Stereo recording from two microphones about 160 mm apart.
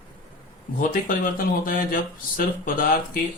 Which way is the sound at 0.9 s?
60° left (ahead or behind).